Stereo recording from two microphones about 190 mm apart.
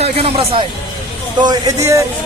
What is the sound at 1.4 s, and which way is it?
Speech, 20° right (ahead or behind).